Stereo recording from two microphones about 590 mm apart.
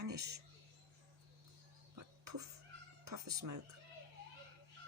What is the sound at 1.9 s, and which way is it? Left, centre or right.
Cough, right.